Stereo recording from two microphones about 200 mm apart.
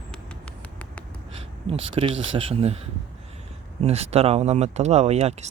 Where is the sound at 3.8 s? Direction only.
30° right (ahead or behind).